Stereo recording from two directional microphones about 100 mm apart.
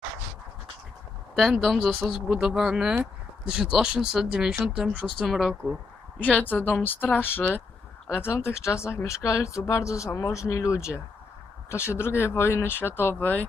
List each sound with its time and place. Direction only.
1.4 s speech: centre (ahead or behind)
6.1 s speech: 15° left (ahead or behind)